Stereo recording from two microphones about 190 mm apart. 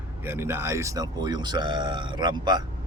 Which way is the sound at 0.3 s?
10° right (ahead or behind).